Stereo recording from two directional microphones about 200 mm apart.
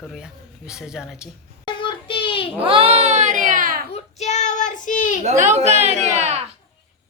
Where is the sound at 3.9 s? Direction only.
35° left (ahead or behind).